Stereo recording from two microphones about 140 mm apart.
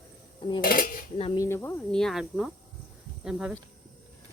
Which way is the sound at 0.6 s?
90° left.